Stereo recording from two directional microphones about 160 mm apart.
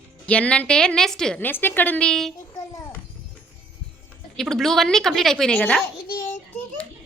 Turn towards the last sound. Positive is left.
turn(degrees=65)  # may be behind; listen again after turning